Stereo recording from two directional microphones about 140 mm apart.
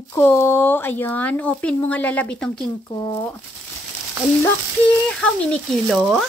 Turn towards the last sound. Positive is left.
turn(degrees=0)  # may be behind; listen again after turning